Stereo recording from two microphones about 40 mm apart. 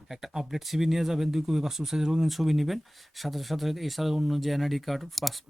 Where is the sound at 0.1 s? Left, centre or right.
Centre.